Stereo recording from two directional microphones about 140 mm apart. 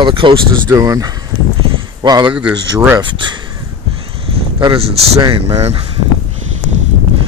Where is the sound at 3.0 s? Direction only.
35° right (ahead or behind).